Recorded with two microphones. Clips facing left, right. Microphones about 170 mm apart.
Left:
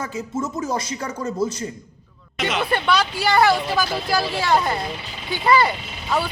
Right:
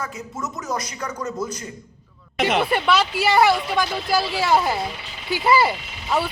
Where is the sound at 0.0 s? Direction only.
25° left (ahead or behind).